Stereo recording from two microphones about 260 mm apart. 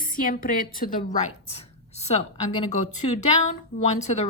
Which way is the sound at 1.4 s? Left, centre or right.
Left.